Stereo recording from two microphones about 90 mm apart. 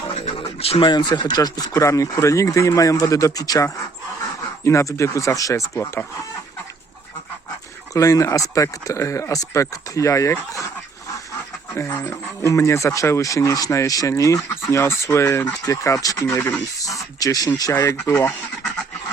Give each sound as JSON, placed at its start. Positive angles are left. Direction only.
{"t": 0.1, "sound": "speech", "side_deg": 90}
{"t": 7.9, "sound": "speech", "side_deg": 40}
{"t": 11.7, "sound": "speech", "side_deg": 35}
{"t": 17.2, "sound": "speech", "side_deg": 45}